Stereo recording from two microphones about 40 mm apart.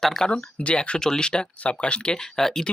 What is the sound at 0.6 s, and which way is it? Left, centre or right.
Speech, left.